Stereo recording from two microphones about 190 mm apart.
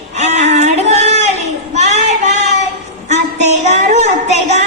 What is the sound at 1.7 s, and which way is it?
Child singing, 35° right (ahead or behind).